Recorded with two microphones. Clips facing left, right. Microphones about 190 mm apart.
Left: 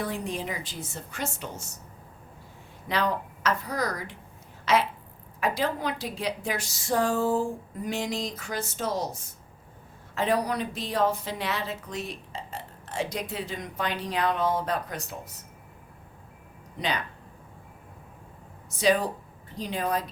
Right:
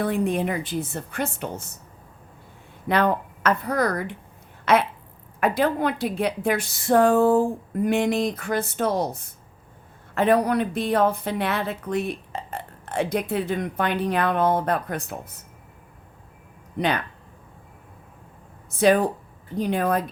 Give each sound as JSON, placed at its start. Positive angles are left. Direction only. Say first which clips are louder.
{"t": 0.0, "sound": "a woman's voice", "louder": "right 8 dB", "side_deg": -60}
{"t": 2.9, "sound": "a woman's voice", "louder": "right 6 dB", "side_deg": -55}
{"t": 18.7, "sound": "a woman's voice", "louder": "right 5 dB", "side_deg": -55}